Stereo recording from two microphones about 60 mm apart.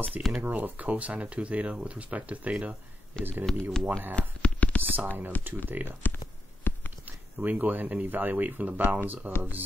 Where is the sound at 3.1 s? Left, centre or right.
Centre.